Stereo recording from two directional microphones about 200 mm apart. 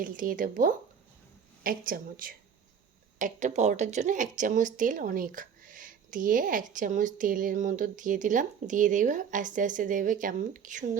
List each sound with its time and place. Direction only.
0.0 s a woman's voice: 40° right (ahead or behind)